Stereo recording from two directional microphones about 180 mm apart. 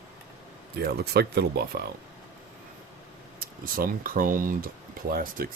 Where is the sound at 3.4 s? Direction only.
50° right (ahead or behind).